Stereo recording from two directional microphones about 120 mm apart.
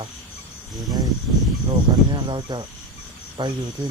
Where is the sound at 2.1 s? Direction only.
40° right (ahead or behind).